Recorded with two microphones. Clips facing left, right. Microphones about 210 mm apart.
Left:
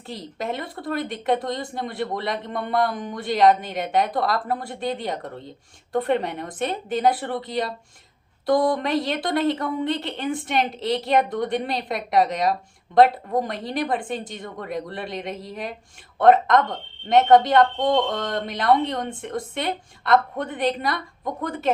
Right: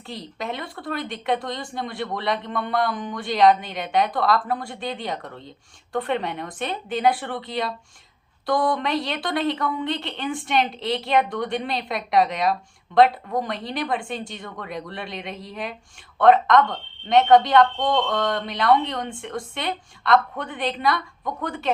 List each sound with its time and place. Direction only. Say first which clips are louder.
0.3 s a woman's voice: left 3 dB; 45° left (ahead or behind)